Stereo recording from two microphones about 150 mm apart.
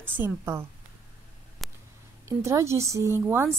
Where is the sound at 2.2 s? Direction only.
20° right (ahead or behind).